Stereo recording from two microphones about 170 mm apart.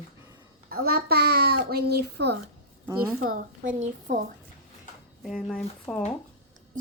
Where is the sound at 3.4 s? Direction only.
50° right (ahead or behind).